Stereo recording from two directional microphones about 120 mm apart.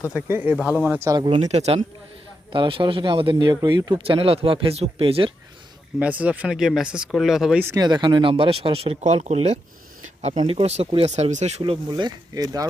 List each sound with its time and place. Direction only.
0.1 s speech: 15° right (ahead or behind)
1.1 s speech: 40° right (ahead or behind)
1.4 s speech: 65° right (ahead or behind)
2.5 s speech: 45° right (ahead or behind)
4.0 s speech: 50° right (ahead or behind)
6.0 s speech: 10° right (ahead or behind)
7.8 s speech: 35° right (ahead or behind)